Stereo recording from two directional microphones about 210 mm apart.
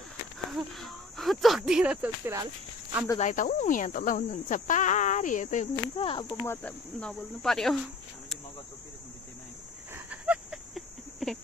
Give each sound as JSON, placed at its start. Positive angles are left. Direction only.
{"t": 0.5, "sound": "speech", "side_deg": 0}
{"t": 3.2, "sound": "cricket", "side_deg": 40}
{"t": 6.2, "sound": "speech", "side_deg": 10}
{"t": 9.9, "sound": "a sound", "side_deg": -5}